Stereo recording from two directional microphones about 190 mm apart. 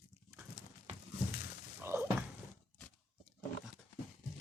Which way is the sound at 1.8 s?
10° right (ahead or behind).